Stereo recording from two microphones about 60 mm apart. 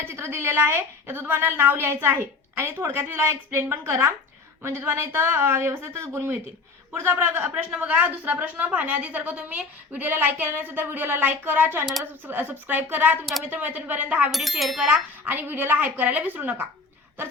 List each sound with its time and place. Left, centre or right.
0.0 s a woman's voice: right
14.3 s speech: centre
15.2 s a woman's voice: right